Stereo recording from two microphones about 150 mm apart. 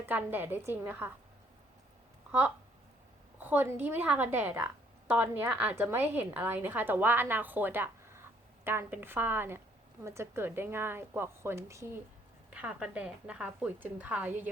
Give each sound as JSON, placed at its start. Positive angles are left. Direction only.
{"t": 0.0, "sound": "a woman's voice", "side_deg": -10}
{"t": 3.4, "sound": "a woman's voice", "side_deg": -15}
{"t": 12.5, "sound": "a woman's voice", "side_deg": -5}